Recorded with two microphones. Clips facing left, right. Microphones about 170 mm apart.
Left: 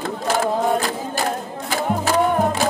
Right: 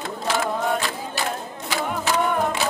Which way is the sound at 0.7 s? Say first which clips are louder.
Left 4 dB; 40° left (ahead or behind).